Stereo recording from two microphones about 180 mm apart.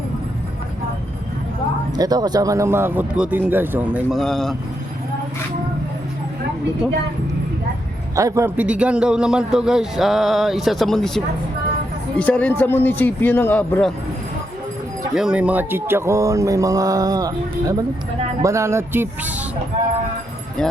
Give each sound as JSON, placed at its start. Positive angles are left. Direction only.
{"t": 2.0, "sound": "speech", "side_deg": -20}
{"t": 8.1, "sound": "a man's voice", "side_deg": -15}
{"t": 15.1, "sound": "speech", "side_deg": -5}